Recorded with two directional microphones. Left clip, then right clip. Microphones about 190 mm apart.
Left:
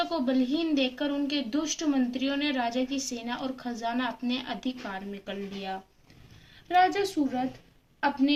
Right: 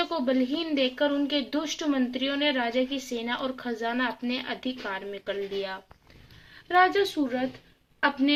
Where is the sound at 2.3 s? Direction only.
25° right (ahead or behind).